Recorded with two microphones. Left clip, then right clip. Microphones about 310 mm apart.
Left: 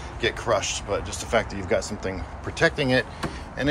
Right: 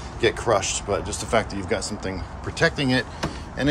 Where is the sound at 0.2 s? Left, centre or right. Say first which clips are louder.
Right 3 dB; centre.